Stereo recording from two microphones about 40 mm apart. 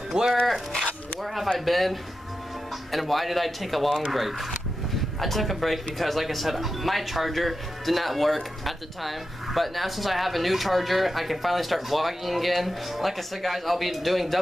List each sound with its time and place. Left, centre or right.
0.1 s speech: centre
1.2 s a sound: centre
1.6 s speech: centre